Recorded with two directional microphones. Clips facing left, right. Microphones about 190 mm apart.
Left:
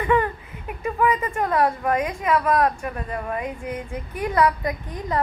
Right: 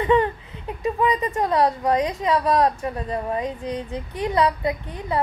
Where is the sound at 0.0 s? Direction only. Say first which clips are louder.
Right 2 dB; 25° right (ahead or behind).